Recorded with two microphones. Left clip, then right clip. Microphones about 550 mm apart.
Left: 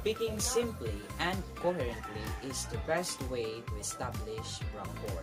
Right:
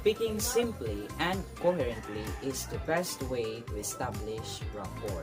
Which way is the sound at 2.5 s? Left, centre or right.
Left.